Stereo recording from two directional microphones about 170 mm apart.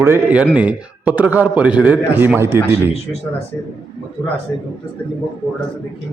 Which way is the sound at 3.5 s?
10° left (ahead or behind).